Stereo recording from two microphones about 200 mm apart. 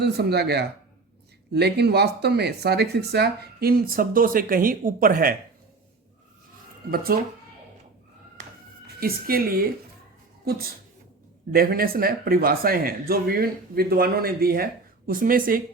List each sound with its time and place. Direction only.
0.0 s speech: 55° right (ahead or behind)
6.9 s speech: 50° right (ahead or behind)
9.0 s speech: 50° right (ahead or behind)